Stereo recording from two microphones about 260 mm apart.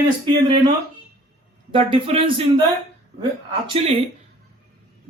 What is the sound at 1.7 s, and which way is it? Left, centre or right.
Speech, right.